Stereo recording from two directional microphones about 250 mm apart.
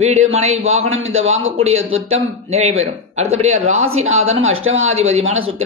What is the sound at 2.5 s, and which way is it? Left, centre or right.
A man's voice, right.